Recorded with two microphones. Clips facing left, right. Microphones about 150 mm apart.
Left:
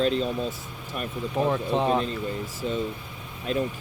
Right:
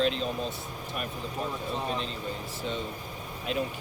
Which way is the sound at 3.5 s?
40° left (ahead or behind).